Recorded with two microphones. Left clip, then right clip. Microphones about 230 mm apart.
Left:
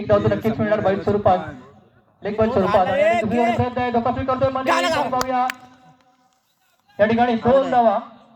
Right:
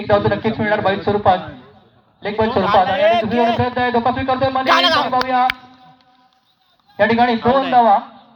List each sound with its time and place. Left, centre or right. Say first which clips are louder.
0.0 s speech: right 2 dB; left
2.5 s a man's voice: right 4 dB; left
3.6 s speech: right 4 dB; left
4.6 s a man's voice: right 5 dB; left
6.9 s speech: right 3 dB; left